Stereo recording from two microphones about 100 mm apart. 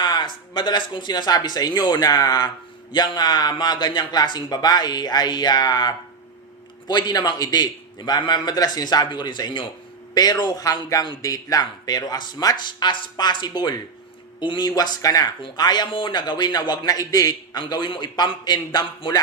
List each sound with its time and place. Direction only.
0.0 s a man's voice: 50° left (ahead or behind)
15.9 s a man's voice: 55° left (ahead or behind)